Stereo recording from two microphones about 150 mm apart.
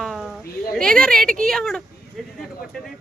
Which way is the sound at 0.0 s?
Centre (ahead or behind).